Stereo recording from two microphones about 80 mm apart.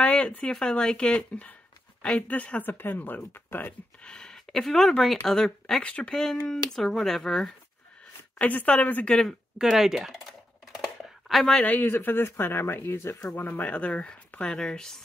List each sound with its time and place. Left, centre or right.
0.0 s speech: centre
4.0 s speech: centre
8.4 s speech: centre
9.6 s speech: centre
11.2 s speech: centre
11.5 s speech: centre